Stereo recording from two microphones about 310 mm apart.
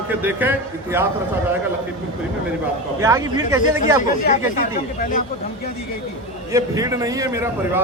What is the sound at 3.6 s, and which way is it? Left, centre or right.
Speech, left.